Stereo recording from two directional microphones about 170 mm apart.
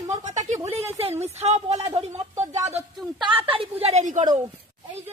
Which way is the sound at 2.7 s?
30° right (ahead or behind).